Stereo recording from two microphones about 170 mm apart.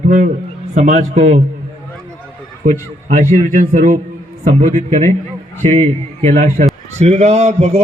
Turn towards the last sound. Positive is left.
turn(degrees=-40)  # may be behind; listen again after turning